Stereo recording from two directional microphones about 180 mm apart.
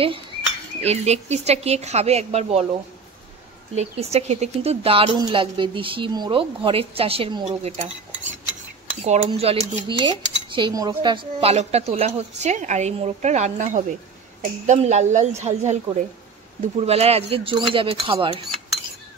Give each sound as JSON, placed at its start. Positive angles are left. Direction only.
{"t": 0.7, "sound": "speech", "side_deg": -35}
{"t": 3.7, "sound": "a woman's voice", "side_deg": -35}
{"t": 7.4, "sound": "cutlery", "side_deg": -40}
{"t": 9.0, "sound": "speech", "side_deg": -35}